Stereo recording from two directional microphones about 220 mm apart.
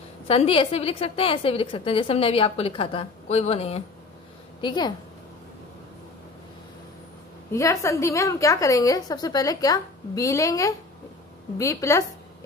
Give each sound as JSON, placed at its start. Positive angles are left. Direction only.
{"t": 0.3, "sound": "a woman's voice", "side_deg": 25}
{"t": 7.5, "sound": "a woman's voice", "side_deg": 15}